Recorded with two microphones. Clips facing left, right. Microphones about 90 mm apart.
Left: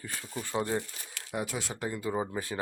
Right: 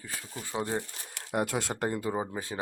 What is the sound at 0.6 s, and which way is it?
Speech, 25° right (ahead or behind).